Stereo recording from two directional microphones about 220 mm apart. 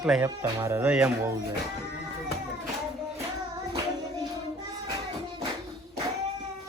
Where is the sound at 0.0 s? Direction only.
5° right (ahead or behind).